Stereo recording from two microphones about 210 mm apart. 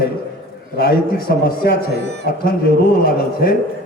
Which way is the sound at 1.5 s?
45° left (ahead or behind).